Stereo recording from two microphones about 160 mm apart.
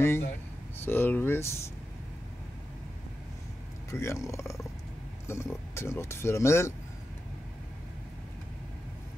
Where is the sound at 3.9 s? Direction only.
20° left (ahead or behind).